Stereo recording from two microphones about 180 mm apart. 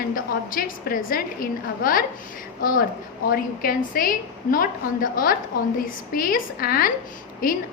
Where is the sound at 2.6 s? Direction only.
50° left (ahead or behind).